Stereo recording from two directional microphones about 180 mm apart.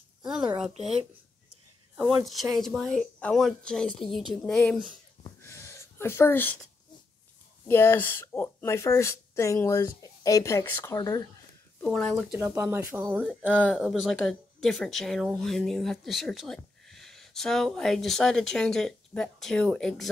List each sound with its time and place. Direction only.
0.2 s a woman's voice: 5° right (ahead or behind)
2.0 s speech: centre (ahead or behind)
5.2 s a sound: 15° left (ahead or behind)
7.6 s speech: 15° left (ahead or behind)
11.8 s speech: 5° left (ahead or behind)
12.4 s speech: 15° right (ahead or behind); by 20.1 s 5° left (ahead or behind)